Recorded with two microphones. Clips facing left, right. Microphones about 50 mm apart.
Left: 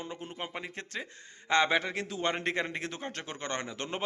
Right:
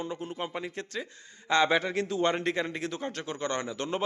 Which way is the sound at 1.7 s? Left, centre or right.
Centre.